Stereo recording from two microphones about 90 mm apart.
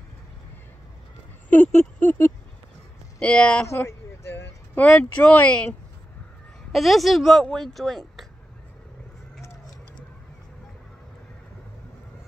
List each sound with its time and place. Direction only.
1.5 s speech: 20° left (ahead or behind)
3.6 s a sound: 30° left (ahead or behind)
4.7 s speech: 10° left (ahead or behind)
6.7 s a woman's voice: centre (ahead or behind)